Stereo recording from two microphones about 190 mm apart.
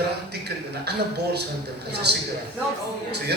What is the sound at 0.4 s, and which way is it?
A man's voice, 60° right (ahead or behind).